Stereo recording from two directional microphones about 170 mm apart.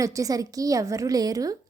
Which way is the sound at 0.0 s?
20° right (ahead or behind).